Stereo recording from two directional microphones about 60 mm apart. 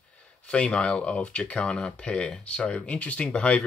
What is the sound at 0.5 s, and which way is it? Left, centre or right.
Speech, centre.